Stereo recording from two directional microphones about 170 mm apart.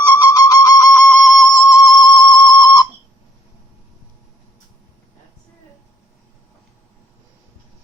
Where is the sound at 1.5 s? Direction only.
25° left (ahead or behind).